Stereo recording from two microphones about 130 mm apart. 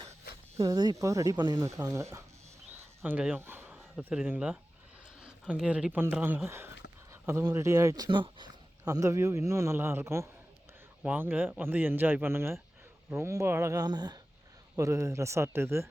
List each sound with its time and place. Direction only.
0.6 s speech: 30° right (ahead or behind)
3.0 s speech: 10° right (ahead or behind)